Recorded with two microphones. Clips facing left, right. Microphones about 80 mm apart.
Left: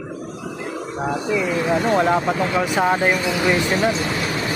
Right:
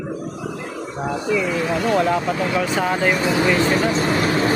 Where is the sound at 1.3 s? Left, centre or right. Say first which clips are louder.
Left 2 dB; left.